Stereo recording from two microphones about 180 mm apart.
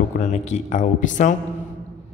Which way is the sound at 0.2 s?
40° left (ahead or behind).